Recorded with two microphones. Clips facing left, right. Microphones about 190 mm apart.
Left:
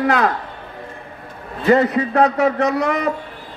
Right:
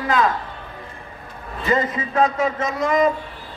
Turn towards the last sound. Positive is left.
turn(degrees=70)  # may be behind; listen again after turning